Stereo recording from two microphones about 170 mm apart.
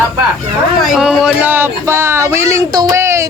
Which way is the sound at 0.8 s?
Centre (ahead or behind).